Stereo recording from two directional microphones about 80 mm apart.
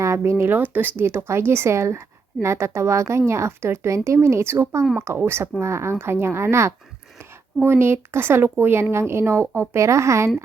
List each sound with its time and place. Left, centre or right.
0.0 s speech: right